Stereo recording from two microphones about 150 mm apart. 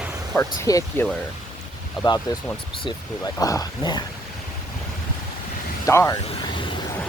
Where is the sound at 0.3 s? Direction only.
20° left (ahead or behind).